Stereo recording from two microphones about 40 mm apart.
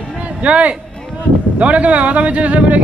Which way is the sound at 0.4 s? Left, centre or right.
Right.